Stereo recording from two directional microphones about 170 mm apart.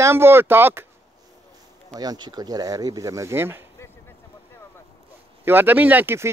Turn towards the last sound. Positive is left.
turn(degrees=-10)  # may be behind; listen again after turning